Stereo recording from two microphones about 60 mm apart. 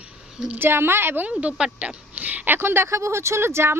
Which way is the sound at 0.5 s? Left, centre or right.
Right.